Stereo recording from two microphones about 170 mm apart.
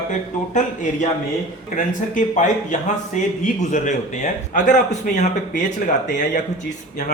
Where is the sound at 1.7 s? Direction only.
45° left (ahead or behind).